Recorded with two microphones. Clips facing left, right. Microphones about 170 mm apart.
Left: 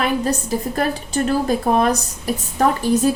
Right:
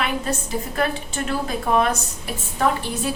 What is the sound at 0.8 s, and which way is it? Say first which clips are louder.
A woman's voice: left 2 dB; 40° left (ahead or behind).